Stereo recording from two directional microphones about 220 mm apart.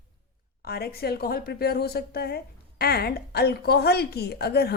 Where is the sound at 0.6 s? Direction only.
45° left (ahead or behind).